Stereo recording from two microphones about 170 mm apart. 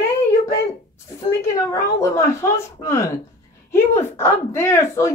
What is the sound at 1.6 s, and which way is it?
A woman's voice, 15° left (ahead or behind).